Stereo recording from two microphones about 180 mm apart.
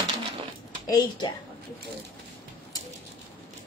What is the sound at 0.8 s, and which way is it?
Speech, 20° left (ahead or behind).